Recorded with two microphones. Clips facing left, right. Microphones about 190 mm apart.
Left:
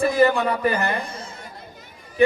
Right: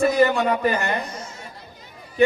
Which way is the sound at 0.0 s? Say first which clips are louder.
Even; 30° left (ahead or behind).